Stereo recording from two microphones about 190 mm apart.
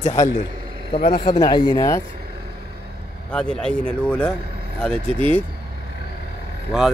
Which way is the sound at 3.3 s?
5° left (ahead or behind).